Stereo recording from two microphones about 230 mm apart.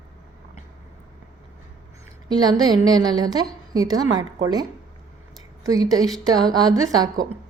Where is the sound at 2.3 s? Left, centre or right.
Centre.